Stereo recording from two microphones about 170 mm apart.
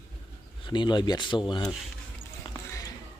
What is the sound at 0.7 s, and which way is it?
Speech, 25° left (ahead or behind).